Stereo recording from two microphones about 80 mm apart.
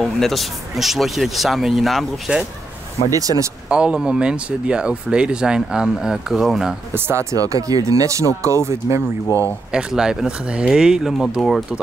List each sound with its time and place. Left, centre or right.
0.0 s speech: centre
3.1 s speech: right
3.6 s speech: centre
6.9 s speech: right
7.3 s speech: right
9.7 s speech: centre